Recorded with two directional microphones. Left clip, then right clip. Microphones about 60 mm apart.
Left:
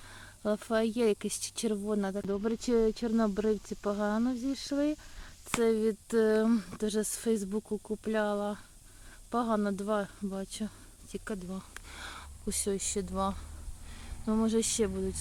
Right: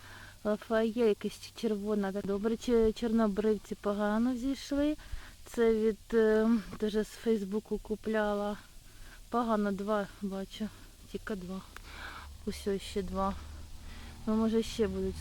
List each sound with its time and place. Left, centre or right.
0.1 s speech: left
2.2 s speech: centre
5.5 s speech: left
8.1 s speech: left
11.9 s a sound: left
13.1 s speech: left